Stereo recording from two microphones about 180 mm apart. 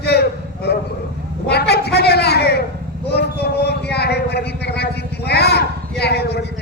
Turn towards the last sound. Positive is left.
turn(degrees=65)  # may be behind; listen again after turning